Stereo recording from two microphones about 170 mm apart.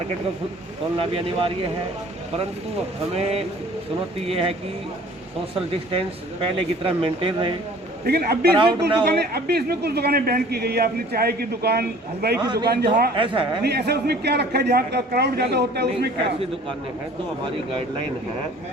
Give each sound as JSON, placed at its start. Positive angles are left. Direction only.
{"t": 0.9, "sound": "speech", "side_deg": -30}
{"t": 3.2, "sound": "speech", "side_deg": -35}
{"t": 5.5, "sound": "speech", "side_deg": -35}
{"t": 8.0, "sound": "a man's voice", "side_deg": -70}
{"t": 12.4, "sound": "speech", "side_deg": -25}
{"t": 12.6, "sound": "a man's voice", "side_deg": -70}
{"t": 13.1, "sound": "speech", "side_deg": -30}
{"t": 13.7, "sound": "a man's voice", "side_deg": -70}
{"t": 17.4, "sound": "speech", "side_deg": -30}